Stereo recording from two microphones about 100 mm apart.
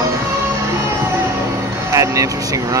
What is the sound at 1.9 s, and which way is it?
Vehicle, 30° right (ahead or behind).